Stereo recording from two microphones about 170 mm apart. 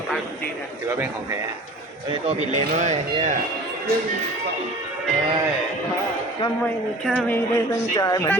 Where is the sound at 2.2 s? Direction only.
45° right (ahead or behind).